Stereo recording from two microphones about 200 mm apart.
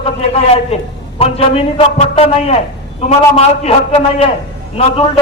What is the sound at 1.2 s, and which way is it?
A man's voice, 30° left (ahead or behind).